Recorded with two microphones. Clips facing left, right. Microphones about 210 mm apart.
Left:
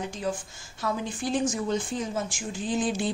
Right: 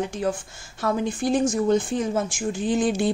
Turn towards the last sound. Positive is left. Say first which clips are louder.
# right 5 dB
turn(degrees=-60)  # may be behind; listen again after turning